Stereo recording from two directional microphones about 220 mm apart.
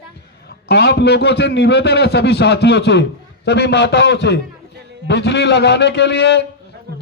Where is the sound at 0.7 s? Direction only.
50° left (ahead or behind).